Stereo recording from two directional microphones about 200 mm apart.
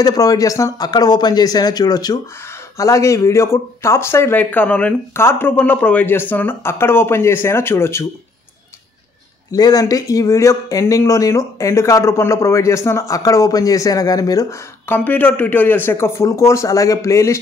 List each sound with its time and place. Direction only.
0.0 s speech: 20° left (ahead or behind)
9.5 s speech: 20° left (ahead or behind)